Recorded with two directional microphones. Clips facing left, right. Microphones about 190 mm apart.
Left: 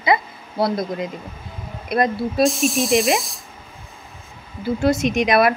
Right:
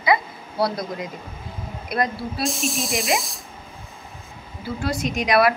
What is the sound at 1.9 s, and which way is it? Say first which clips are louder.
Speech: left 5 dB; 25° left (ahead or behind).